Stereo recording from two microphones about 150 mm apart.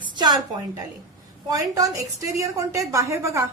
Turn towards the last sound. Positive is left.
turn(degrees=-20)  # may be behind; listen again after turning